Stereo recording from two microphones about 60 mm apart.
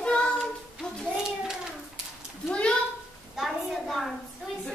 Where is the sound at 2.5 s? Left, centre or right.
Centre.